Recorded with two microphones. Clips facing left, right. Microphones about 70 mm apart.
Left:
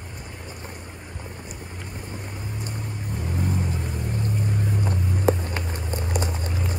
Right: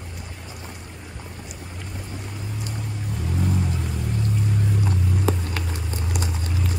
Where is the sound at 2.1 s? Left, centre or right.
Left.